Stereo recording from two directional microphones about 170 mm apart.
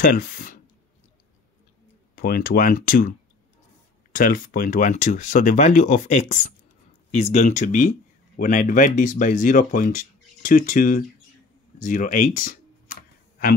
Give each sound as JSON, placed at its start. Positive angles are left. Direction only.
{"t": 0.0, "sound": "speech", "side_deg": 60}
{"t": 2.1, "sound": "speech", "side_deg": 60}